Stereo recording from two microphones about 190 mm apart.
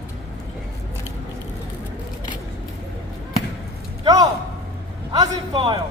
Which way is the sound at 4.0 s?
20° right (ahead or behind).